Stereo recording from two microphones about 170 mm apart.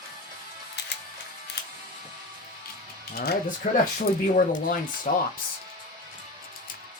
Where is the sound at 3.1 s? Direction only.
70° left (ahead or behind).